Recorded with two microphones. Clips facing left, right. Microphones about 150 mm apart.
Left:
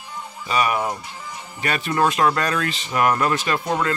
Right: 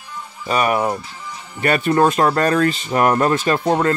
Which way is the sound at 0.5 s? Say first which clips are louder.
Right 4 dB; 45° right (ahead or behind).